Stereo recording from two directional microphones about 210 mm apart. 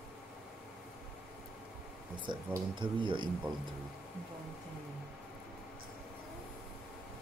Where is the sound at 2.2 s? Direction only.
20° right (ahead or behind).